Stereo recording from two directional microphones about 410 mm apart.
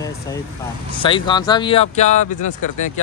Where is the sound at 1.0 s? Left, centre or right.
Centre.